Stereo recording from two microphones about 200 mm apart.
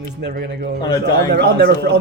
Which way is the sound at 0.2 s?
50° right (ahead or behind).